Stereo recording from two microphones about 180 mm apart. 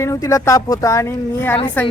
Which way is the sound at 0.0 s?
15° left (ahead or behind).